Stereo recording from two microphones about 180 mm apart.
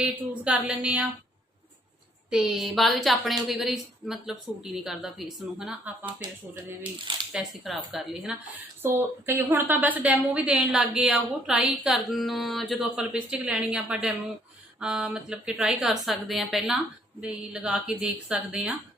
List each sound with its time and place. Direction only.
0.0 s a sound: 5° right (ahead or behind)
2.3 s a woman's voice: centre (ahead or behind)
7.3 s a woman's voice: centre (ahead or behind)
8.8 s a woman's voice: 15° right (ahead or behind)